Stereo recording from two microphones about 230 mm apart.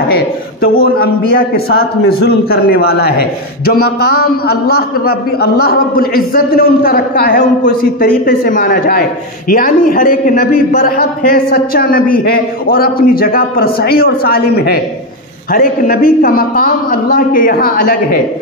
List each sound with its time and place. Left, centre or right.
0.1 s a man's voice: left